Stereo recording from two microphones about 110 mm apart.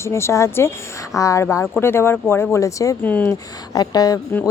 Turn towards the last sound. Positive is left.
turn(degrees=35)  # may be behind; listen again after turning